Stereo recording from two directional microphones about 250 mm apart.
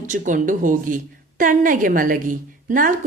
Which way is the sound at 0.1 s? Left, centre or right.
Right.